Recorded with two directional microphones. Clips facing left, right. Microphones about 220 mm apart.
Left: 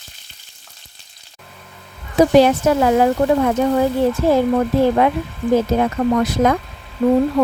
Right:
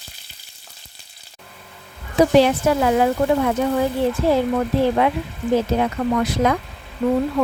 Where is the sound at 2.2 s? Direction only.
45° left (ahead or behind).